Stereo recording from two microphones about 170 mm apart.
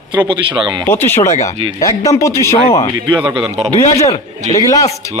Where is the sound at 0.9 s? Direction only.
15° left (ahead or behind).